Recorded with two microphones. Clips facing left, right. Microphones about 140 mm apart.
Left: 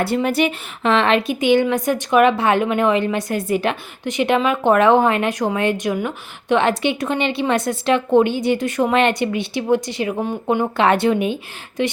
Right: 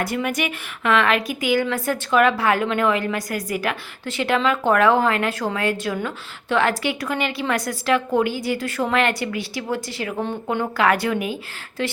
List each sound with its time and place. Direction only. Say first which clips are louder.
0.0 s a woman's voice: left 6 dB; 30° left (ahead or behind)